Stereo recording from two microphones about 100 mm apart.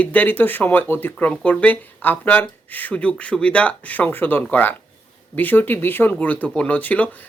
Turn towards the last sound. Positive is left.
turn(degrees=15)  # may be behind; listen again after turning